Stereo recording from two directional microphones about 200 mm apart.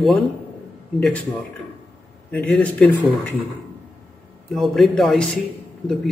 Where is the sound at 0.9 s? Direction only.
5° left (ahead or behind).